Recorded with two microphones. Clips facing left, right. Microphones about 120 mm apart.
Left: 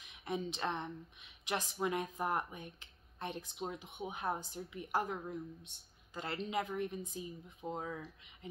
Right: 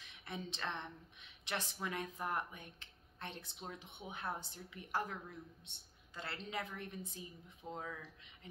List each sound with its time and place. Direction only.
0.0 s speech: 15° left (ahead or behind)